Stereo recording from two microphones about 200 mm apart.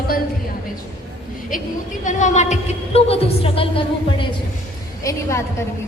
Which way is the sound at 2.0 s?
40° left (ahead or behind).